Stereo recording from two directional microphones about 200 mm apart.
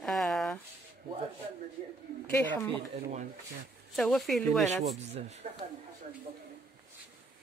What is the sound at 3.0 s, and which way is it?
Speech, 35° right (ahead or behind).